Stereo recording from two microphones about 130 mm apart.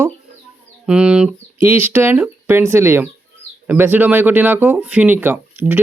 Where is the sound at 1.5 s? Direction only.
20° right (ahead or behind).